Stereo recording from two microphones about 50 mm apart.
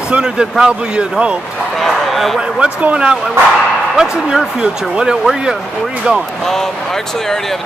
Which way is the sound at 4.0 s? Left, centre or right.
Centre.